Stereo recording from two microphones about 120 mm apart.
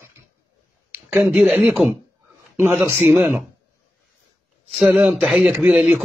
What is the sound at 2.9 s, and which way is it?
Speech, 20° right (ahead or behind).